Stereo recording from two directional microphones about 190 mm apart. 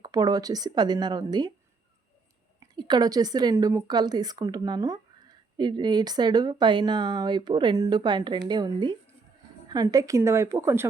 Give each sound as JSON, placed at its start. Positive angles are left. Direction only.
{"t": 0.0, "sound": "a woman's voice", "side_deg": -20}
{"t": 2.6, "sound": "a woman's voice", "side_deg": -25}